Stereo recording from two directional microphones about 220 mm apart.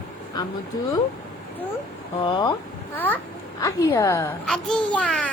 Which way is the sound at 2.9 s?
10° left (ahead or behind).